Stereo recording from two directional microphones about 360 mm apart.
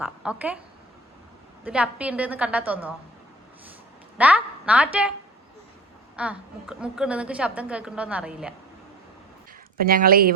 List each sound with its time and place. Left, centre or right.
0.0 s a woman's voice: centre
1.6 s a woman's voice: centre
4.2 s a woman's voice: centre
6.1 s a woman's voice: centre
9.7 s speech: right